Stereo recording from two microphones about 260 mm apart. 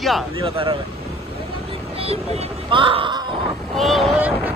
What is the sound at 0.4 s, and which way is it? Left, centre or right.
Speech, right.